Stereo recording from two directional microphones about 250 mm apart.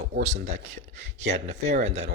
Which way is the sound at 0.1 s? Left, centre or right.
Right.